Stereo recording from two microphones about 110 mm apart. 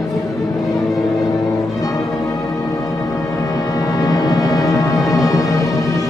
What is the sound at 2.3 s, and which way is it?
Music, 30° left (ahead or behind).